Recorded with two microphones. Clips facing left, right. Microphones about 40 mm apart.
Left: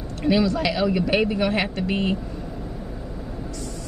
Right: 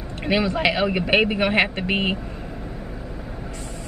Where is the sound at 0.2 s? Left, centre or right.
Right.